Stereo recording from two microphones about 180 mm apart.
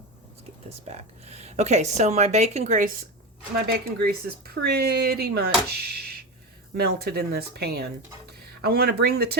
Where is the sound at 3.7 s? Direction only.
60° right (ahead or behind).